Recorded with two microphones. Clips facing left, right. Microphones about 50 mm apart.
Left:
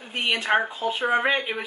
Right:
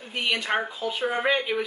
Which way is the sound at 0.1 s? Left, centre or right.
Centre.